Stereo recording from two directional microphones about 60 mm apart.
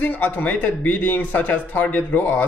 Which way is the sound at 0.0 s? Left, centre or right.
Left.